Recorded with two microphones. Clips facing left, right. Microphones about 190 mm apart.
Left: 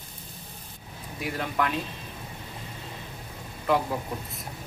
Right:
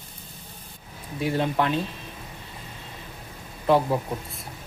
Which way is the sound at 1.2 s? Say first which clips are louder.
Right 5 dB; 25° right (ahead or behind).